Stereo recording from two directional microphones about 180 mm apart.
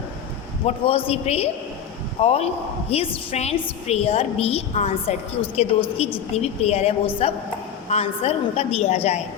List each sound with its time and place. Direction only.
0.6 s a woman's voice: 30° left (ahead or behind)